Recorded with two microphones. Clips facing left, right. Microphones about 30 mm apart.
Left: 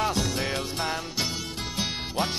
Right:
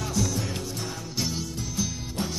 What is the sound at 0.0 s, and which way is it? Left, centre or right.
Music, left.